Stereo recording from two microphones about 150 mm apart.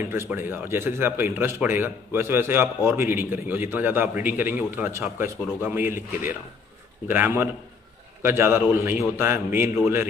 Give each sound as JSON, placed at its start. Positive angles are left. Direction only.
{"t": 0.0, "sound": "a man's voice", "side_deg": -15}